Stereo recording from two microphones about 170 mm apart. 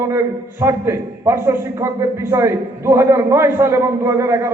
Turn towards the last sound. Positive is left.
turn(degrees=-15)  # may be behind; listen again after turning